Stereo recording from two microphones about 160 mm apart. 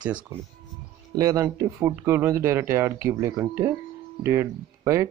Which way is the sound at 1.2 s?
20° right (ahead or behind).